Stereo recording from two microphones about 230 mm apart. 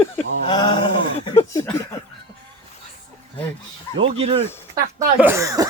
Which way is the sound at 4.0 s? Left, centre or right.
Right.